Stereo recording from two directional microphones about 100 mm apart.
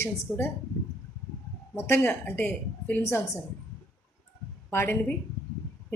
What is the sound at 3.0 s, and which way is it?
Speech, 25° left (ahead or behind).